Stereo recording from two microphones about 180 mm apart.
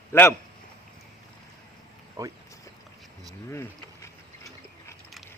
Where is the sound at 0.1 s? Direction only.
15° left (ahead or behind).